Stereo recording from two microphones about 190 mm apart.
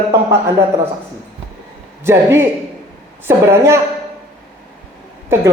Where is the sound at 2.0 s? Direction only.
10° right (ahead or behind).